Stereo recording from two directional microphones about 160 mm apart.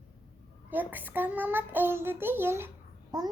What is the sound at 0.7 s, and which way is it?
A child's voice, 10° right (ahead or behind).